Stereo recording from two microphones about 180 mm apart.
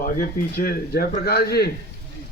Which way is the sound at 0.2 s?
55° left (ahead or behind).